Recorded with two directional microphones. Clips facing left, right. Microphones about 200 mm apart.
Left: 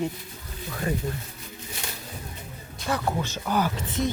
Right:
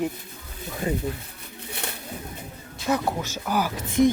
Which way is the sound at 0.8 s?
20° right (ahead or behind).